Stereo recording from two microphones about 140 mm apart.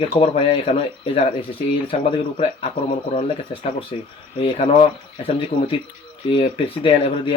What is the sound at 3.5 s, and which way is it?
Speech, 40° left (ahead or behind).